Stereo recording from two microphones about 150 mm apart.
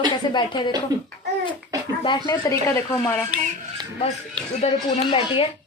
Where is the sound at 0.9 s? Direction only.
25° right (ahead or behind).